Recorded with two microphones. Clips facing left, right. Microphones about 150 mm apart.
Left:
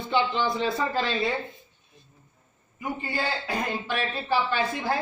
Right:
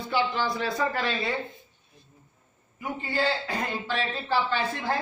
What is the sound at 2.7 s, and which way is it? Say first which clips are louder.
Speech: right 1 dB; 15° left (ahead or behind).